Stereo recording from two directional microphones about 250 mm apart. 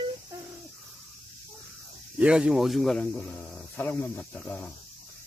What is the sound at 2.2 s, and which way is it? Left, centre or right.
Speech, centre.